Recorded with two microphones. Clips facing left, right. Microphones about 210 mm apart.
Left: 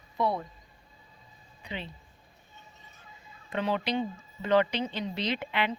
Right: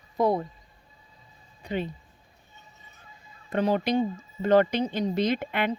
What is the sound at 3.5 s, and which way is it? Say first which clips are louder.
Speech: right 5 dB; 45° right (ahead or behind).